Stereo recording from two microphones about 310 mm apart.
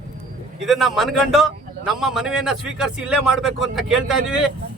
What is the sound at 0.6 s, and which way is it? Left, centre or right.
A man's voice, centre.